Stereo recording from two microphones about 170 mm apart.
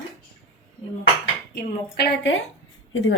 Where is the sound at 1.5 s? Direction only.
70° left (ahead or behind); by 3.1 s 90° left.